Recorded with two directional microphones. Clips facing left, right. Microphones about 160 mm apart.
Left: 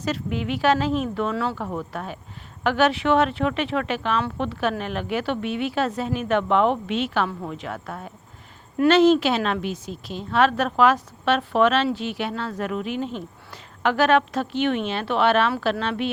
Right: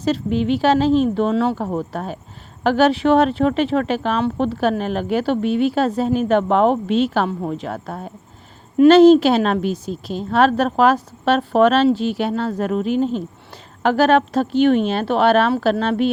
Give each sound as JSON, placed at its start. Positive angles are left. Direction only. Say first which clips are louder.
{"t": 0.0, "sound": "a woman's voice", "louder": "right 7 dB", "side_deg": -30}
{"t": 1.5, "sound": "a woman's voice", "louder": "right 6 dB", "side_deg": -35}